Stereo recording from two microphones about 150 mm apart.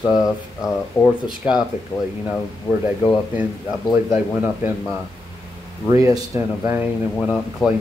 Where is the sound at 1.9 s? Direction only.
15° left (ahead or behind).